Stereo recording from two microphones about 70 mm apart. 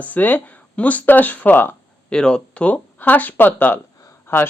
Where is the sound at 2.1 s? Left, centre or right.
Centre; by 4.4 s left.